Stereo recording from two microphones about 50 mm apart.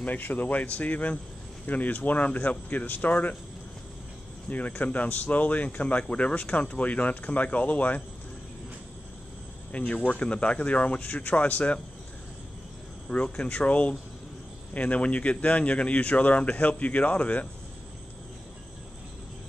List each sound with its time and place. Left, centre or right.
0.0 s speech: left
4.5 s speech: left
9.7 s speech: left
13.1 s speech: left